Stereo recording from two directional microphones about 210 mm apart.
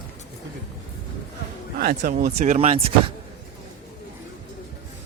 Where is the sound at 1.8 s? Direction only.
45° right (ahead or behind).